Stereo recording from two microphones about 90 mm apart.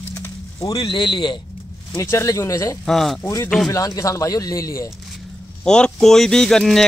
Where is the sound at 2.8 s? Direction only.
5° left (ahead or behind).